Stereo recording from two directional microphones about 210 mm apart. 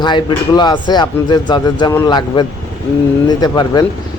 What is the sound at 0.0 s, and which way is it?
A man's voice, 20° left (ahead or behind).